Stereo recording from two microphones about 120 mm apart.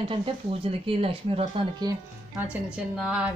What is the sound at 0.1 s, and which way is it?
Speech, 50° right (ahead or behind).